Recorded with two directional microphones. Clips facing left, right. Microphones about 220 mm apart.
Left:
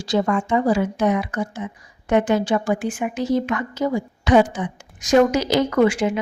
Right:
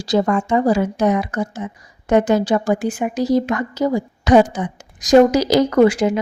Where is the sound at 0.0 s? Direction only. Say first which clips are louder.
Right 3 dB; 40° right (ahead or behind).